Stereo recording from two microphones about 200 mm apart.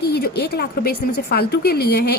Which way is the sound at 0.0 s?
55° left (ahead or behind).